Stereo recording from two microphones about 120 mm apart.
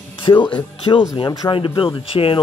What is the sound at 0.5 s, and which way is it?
Speech, 40° left (ahead or behind).